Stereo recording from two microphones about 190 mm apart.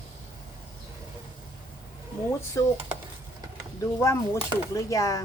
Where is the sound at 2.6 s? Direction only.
15° left (ahead or behind).